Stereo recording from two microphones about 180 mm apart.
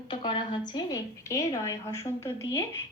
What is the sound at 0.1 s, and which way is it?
A woman's voice, 25° left (ahead or behind).